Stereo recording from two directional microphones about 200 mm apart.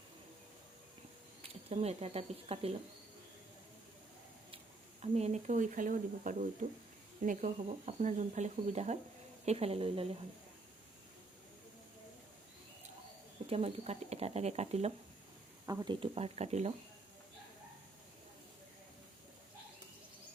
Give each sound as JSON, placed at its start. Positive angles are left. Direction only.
{"t": 1.7, "sound": "speech", "side_deg": -30}
{"t": 5.1, "sound": "speech", "side_deg": -35}
{"t": 13.5, "sound": "speech", "side_deg": -30}
{"t": 15.6, "sound": "speech", "side_deg": -20}